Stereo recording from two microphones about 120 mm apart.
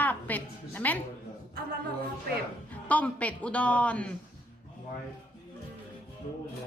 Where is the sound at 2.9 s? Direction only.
10° left (ahead or behind).